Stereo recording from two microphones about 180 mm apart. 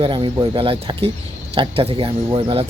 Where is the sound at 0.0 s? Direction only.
30° right (ahead or behind).